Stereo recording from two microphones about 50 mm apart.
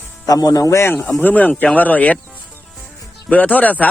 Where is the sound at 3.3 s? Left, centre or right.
Left.